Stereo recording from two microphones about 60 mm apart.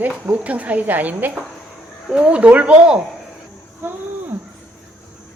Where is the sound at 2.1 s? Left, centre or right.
Centre.